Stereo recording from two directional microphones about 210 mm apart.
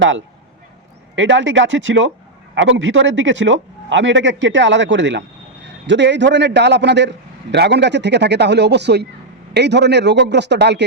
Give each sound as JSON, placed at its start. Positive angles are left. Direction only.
{"t": 1.1, "sound": "speech", "side_deg": -60}